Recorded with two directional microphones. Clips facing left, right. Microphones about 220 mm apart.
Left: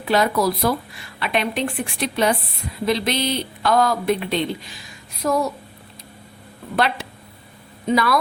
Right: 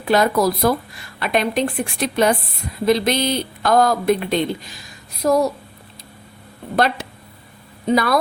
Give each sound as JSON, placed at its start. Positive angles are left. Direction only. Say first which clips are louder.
{"t": 0.0, "sound": "speech", "louder": "right 2 dB", "side_deg": -45}
{"t": 6.7, "sound": "speech", "louder": "right 3 dB", "side_deg": -40}